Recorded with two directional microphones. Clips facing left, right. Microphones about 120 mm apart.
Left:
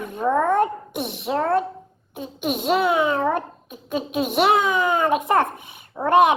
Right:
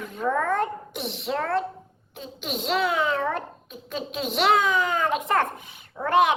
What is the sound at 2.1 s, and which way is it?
Speech, 55° left (ahead or behind).